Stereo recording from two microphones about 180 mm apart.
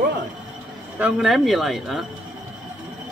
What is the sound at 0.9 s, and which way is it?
Speech, 5° right (ahead or behind).